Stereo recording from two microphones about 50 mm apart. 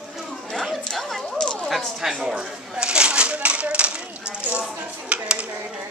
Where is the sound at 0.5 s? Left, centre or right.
Centre.